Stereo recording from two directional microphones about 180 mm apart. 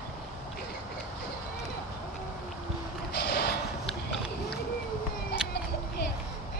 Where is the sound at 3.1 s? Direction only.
65° left (ahead or behind).